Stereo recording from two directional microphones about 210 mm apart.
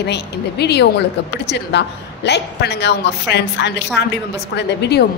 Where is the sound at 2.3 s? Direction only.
55° left (ahead or behind).